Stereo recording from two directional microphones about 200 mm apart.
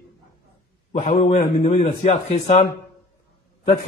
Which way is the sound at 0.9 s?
30° left (ahead or behind).